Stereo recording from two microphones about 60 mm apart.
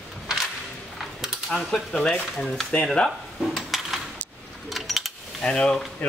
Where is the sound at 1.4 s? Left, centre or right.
Centre.